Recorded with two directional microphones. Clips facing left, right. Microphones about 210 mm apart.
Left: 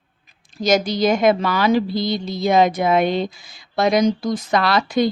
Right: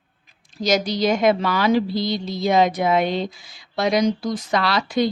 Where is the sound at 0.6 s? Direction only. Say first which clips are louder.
Left 3 dB; 50° left (ahead or behind).